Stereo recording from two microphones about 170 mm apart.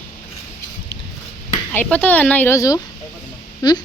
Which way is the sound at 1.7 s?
10° left (ahead or behind).